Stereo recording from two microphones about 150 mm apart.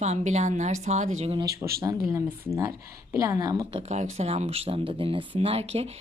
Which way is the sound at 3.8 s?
50° right (ahead or behind).